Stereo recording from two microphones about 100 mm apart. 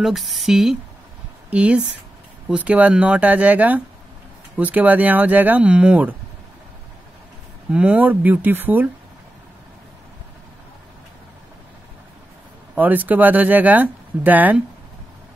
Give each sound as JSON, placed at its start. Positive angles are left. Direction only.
{"t": 0.0, "sound": "a woman's voice", "side_deg": 0}
{"t": 7.7, "sound": "speech", "side_deg": -15}
{"t": 12.7, "sound": "speech", "side_deg": -15}